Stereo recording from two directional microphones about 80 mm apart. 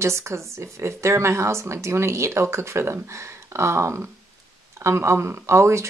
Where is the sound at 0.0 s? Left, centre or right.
Right.